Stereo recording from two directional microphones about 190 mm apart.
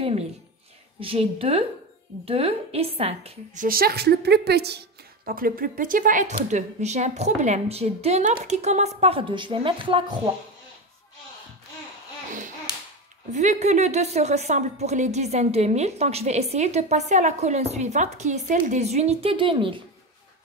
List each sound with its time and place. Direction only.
0.9 s a woman's voice: 30° right (ahead or behind)
3.6 s a woman's voice: 50° right (ahead or behind); by 10.3 s 25° right (ahead or behind)
13.3 s a woman's voice: 40° right (ahead or behind)